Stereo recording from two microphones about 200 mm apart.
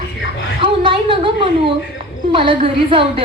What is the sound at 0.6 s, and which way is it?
Music, 25° right (ahead or behind).